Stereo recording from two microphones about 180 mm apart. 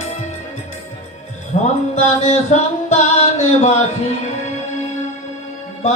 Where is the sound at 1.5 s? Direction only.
40° left (ahead or behind).